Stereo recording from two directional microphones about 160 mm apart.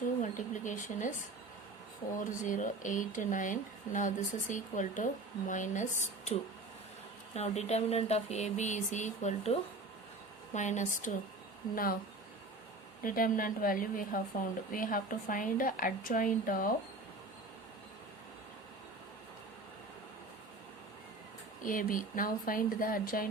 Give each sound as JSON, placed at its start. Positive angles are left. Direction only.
{"t": 0.2, "sound": "speech", "side_deg": 50}
{"t": 2.1, "sound": "speech", "side_deg": 55}
{"t": 7.3, "sound": "speech", "side_deg": 45}
{"t": 11.7, "sound": "a woman's voice", "side_deg": 65}
{"t": 13.0, "sound": "a woman's voice", "side_deg": 60}
{"t": 21.6, "sound": "a woman's voice", "side_deg": 60}